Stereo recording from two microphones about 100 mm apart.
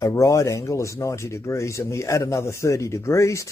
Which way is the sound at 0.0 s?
30° left (ahead or behind).